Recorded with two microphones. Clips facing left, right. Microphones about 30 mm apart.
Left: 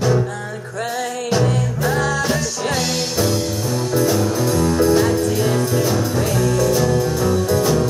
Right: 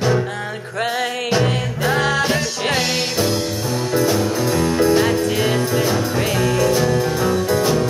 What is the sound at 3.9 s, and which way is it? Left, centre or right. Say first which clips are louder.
Music: even; centre.